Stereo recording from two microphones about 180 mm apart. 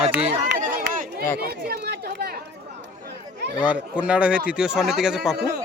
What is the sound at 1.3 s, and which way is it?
Chatter, 60° right (ahead or behind).